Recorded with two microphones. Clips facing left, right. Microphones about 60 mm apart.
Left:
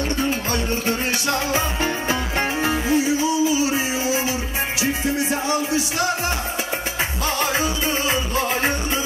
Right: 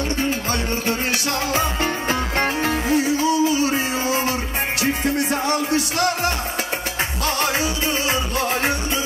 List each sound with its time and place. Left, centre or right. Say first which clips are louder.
1.5 s music: right 1 dB; right
7.5 s music: even; right